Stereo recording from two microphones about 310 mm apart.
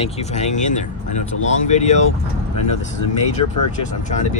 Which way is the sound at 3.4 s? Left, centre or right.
Left.